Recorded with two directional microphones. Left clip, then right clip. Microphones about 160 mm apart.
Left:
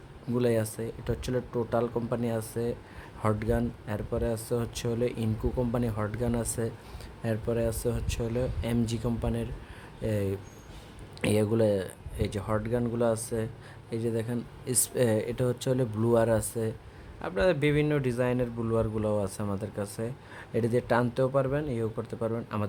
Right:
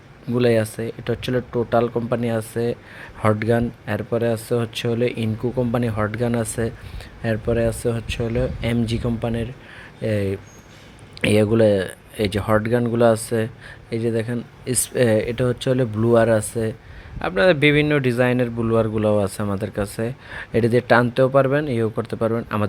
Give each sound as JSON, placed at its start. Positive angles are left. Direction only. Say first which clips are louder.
{"t": 0.3, "sound": "a man's voice", "louder": "right 9 dB", "side_deg": -15}